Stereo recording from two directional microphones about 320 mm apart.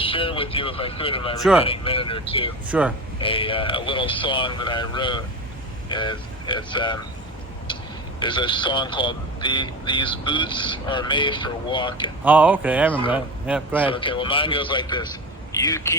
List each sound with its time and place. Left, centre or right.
0.0 s a man's voice: centre
2.6 s speech: centre
3.2 s a man's voice: centre
7.7 s a sound: centre
8.2 s a man's voice: centre
12.2 s speech: centre
13.9 s a man's voice: centre